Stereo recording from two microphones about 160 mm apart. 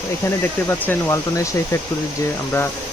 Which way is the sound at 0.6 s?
15° left (ahead or behind).